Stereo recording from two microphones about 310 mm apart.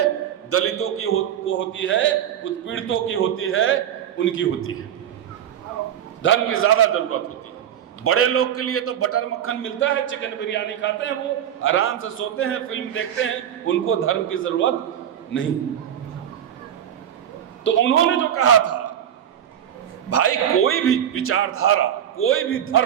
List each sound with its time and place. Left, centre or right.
0.5 s a man's voice: left
6.2 s a man's voice: left
17.6 s a man's voice: left
20.1 s a man's voice: left